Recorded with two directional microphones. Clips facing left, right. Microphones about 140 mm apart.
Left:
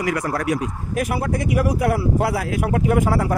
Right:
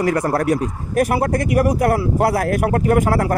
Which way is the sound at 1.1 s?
65° right (ahead or behind).